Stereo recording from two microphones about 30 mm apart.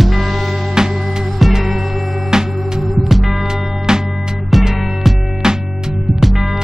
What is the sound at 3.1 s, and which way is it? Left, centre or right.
Music, centre.